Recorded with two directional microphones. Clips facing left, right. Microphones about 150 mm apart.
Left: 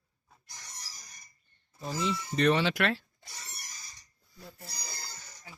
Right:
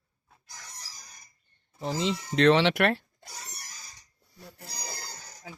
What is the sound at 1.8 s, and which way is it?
Speech, 80° right.